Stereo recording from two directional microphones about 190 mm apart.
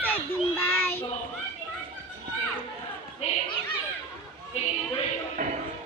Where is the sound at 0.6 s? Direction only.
10° left (ahead or behind).